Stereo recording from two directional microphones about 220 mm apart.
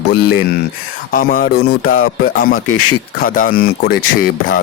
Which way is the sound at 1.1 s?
40° left (ahead or behind).